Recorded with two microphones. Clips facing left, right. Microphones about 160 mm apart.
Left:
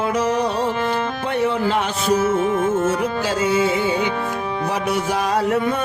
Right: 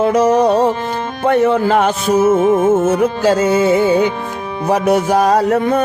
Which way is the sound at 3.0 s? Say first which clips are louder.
Right 8 dB; 45° right (ahead or behind).